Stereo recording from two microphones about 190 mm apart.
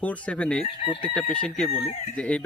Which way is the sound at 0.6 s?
30° left (ahead or behind).